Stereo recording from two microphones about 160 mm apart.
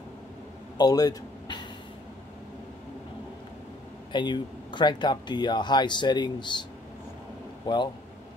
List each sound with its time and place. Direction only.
0.7 s a sound: 25° left (ahead or behind)
4.1 s speech: 30° left (ahead or behind)
7.6 s speech: 30° left (ahead or behind)